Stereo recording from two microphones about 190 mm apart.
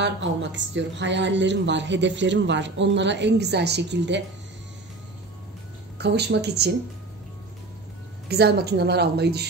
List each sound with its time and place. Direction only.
0.0 s speech: 70° right (ahead or behind)
5.9 s a woman's voice: 60° right (ahead or behind)
8.3 s a woman's voice: 55° right (ahead or behind)